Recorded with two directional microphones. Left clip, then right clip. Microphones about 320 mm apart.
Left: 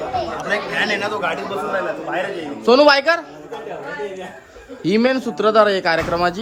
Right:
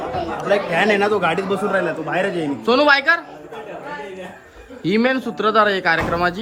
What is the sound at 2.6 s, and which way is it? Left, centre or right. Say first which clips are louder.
Speech: left 3 dB; centre.